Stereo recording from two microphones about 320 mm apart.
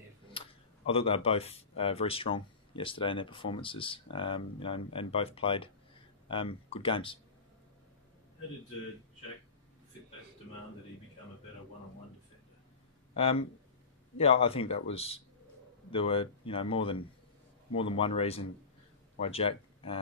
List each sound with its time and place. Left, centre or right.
0.3 s a sound: centre
0.8 s speech: centre
13.1 s speech: centre